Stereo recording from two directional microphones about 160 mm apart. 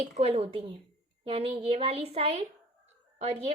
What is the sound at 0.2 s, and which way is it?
A woman's voice, 40° right (ahead or behind).